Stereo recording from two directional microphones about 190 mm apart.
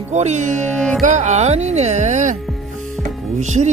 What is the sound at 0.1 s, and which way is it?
Speech, 35° right (ahead or behind).